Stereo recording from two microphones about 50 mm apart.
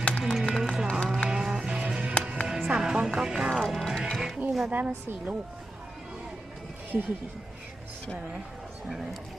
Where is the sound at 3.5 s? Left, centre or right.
Centre.